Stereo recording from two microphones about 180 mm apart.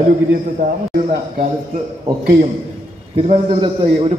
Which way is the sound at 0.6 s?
45° right (ahead or behind).